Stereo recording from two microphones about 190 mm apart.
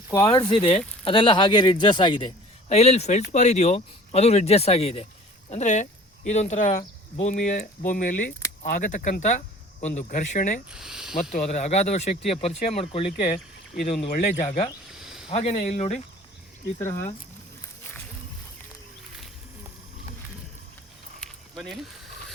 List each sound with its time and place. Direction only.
0.1 s a man's voice: 20° left (ahead or behind); by 10.6 s 40° left (ahead or behind)
10.7 s speech: 5° right (ahead or behind)
11.1 s speech: 45° left (ahead or behind)
14.8 s a sound: 5° right (ahead or behind)
15.3 s speech: 35° left (ahead or behind)
21.2 s a sound: centre (ahead or behind)